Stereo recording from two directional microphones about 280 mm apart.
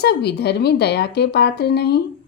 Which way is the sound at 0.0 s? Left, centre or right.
Left.